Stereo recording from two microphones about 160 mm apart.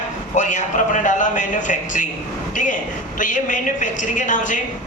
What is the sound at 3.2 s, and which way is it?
A man's voice, 55° left (ahead or behind).